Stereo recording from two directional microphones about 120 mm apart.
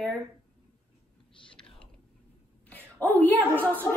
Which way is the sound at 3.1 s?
15° left (ahead or behind).